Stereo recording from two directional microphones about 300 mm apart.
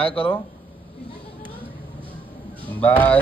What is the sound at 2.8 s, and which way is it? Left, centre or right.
Speech, centre.